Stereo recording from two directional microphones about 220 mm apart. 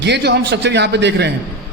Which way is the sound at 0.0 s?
50° right (ahead or behind).